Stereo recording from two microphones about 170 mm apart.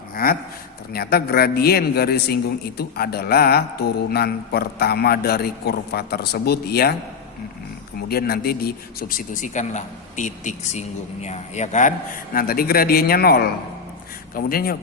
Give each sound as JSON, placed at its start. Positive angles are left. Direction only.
{"t": 0.1, "sound": "a sound", "side_deg": 60}
{"t": 0.9, "sound": "a man's voice", "side_deg": 65}
{"t": 8.0, "sound": "speech", "side_deg": 65}